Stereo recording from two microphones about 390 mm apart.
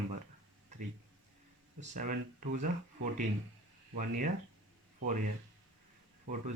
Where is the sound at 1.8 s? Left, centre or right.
Right.